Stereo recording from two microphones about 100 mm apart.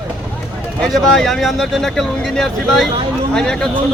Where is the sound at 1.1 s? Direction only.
Centre (ahead or behind).